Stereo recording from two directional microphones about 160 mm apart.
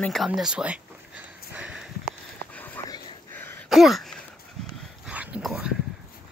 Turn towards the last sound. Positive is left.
turn(degrees=-5)  # may be behind; listen again after turning